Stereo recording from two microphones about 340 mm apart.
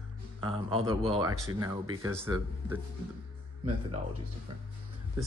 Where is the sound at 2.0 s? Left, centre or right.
Centre.